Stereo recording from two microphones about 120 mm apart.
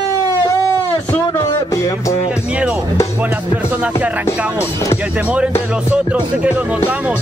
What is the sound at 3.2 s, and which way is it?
Speech, 15° right (ahead or behind).